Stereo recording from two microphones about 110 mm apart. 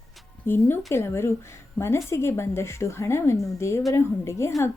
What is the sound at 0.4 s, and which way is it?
Speech, 20° left (ahead or behind).